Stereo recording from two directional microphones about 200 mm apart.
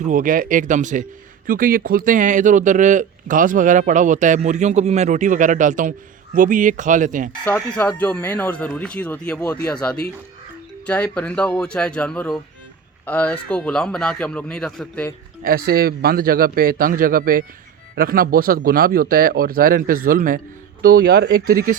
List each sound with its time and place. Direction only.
0.0 s speech: 40° right (ahead or behind)
7.4 s a man's voice: 10° left (ahead or behind)
15.4 s speech: 50° right (ahead or behind)